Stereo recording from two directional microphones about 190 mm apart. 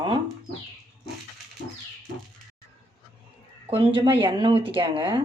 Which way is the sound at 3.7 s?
25° right (ahead or behind).